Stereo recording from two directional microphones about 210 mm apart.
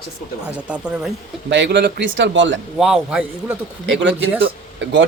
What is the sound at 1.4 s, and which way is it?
Speech, 55° right (ahead or behind).